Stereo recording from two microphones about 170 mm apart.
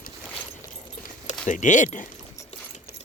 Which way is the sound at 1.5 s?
45° left (ahead or behind).